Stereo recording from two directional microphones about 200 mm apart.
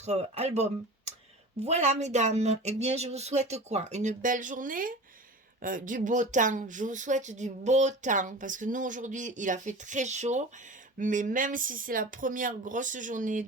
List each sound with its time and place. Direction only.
0.0 s speech: 35° right (ahead or behind)